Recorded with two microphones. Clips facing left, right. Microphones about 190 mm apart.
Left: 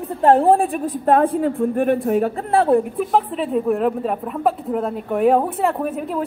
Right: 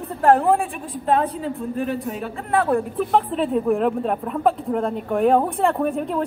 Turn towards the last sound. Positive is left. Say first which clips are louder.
# right 1 dB
turn(degrees=5)  # may be behind; listen again after turning